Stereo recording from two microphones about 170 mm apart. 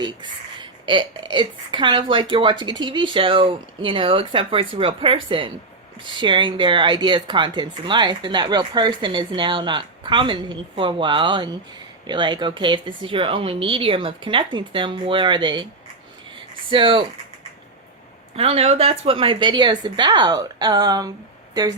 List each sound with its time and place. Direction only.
0.0 s a woman's voice: 25° right (ahead or behind)
16.6 s speech: 30° right (ahead or behind)
18.3 s speech: 35° right (ahead or behind)